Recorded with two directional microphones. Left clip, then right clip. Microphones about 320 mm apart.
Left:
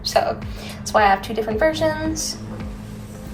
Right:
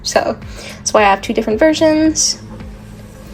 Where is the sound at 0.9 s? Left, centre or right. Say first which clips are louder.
Right 6 dB; right.